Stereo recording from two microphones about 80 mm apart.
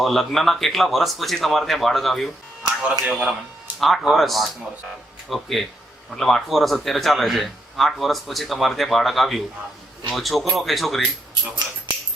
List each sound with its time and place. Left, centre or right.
0.0 s speech: centre
3.0 s speech: centre
3.8 s speech: centre